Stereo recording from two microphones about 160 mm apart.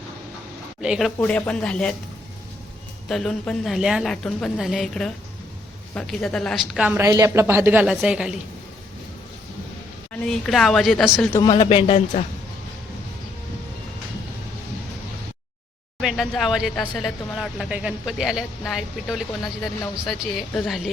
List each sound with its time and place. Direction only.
0.8 s a woman's voice: 5° right (ahead or behind)
1.2 s speech: 10° left (ahead or behind)
3.1 s a woman's voice: 5° left (ahead or behind)
6.8 s a woman's voice: 15° right (ahead or behind)
10.1 s a woman's voice: 5° left (ahead or behind)
11.3 s speech: 20° left (ahead or behind)
11.5 s speech: 35° left (ahead or behind)
16.0 s a woman's voice: centre (ahead or behind)